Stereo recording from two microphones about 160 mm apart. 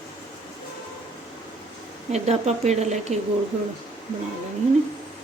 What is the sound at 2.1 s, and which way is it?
A woman's voice, 45° right (ahead or behind).